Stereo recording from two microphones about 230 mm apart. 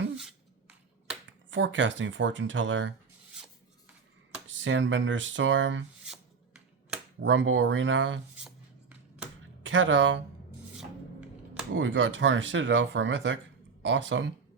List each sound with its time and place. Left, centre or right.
1.5 s speech: right
4.4 s speech: right
6.1 s shuffling cards: centre
7.2 s speech: right
8.4 s a sound: centre
9.6 s speech: right
10.8 s a sound: centre
11.7 s speech: right